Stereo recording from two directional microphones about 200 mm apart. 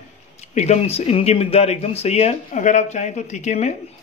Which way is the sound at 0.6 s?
30° left (ahead or behind).